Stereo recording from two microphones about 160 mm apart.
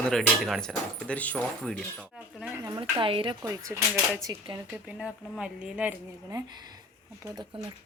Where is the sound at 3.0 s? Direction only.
35° right (ahead or behind).